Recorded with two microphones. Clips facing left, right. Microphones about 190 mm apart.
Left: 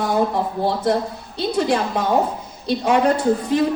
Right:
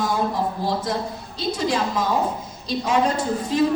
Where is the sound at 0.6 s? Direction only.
60° left (ahead or behind).